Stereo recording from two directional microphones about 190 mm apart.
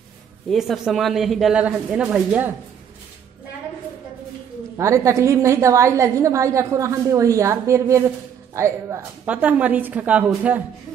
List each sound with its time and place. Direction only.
0.5 s speech: centre (ahead or behind)
4.7 s a woman's voice: 15° right (ahead or behind)